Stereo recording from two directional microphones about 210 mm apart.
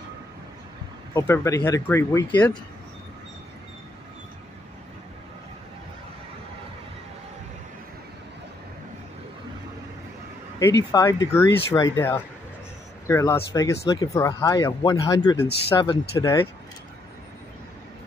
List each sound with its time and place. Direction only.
1.1 s speech: 15° left (ahead or behind)
10.6 s speech: 15° left (ahead or behind)